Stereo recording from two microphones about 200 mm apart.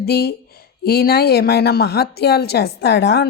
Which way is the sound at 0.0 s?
50° left (ahead or behind).